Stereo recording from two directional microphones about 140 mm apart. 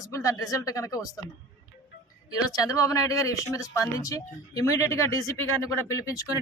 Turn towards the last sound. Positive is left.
turn(degrees=25)  # may be behind; listen again after turning